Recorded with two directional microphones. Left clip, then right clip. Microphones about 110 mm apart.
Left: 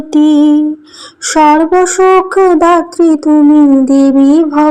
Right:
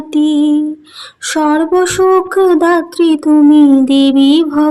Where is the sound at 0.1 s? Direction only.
20° left (ahead or behind).